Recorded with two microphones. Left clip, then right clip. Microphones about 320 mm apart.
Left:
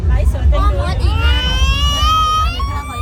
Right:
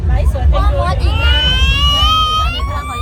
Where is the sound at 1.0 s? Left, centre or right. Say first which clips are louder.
Right 4 dB; centre.